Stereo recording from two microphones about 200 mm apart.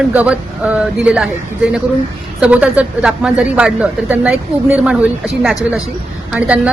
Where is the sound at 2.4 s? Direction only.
5° right (ahead or behind).